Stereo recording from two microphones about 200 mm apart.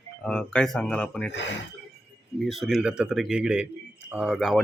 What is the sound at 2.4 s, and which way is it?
Speech, centre (ahead or behind).